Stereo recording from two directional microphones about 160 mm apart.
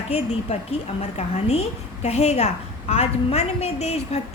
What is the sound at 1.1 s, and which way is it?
A woman's voice, 40° left (ahead or behind).